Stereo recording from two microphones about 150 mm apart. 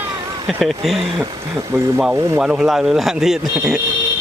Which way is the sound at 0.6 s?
Centre (ahead or behind).